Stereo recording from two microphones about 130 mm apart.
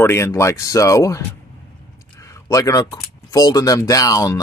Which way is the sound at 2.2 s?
25° left (ahead or behind).